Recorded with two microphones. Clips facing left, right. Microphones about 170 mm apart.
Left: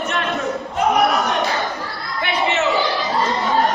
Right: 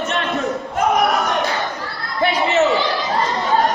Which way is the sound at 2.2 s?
40° right (ahead or behind).